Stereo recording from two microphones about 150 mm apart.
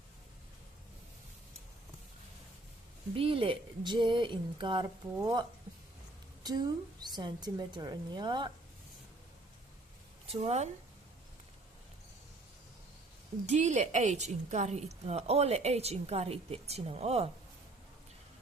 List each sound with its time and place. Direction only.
3.2 s speech: 40° right (ahead or behind)
7.0 s speech: 30° right (ahead or behind)
10.2 s speech: 45° right (ahead or behind)
13.5 s a woman's voice: 55° right (ahead or behind)